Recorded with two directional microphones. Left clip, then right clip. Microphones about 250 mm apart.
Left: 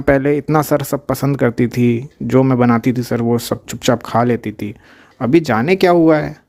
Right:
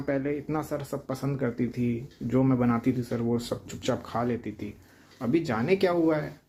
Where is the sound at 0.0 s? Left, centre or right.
Left.